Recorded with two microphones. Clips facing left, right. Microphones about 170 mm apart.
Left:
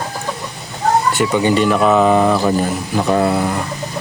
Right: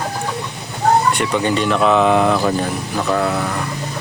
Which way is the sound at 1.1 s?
5° left (ahead or behind).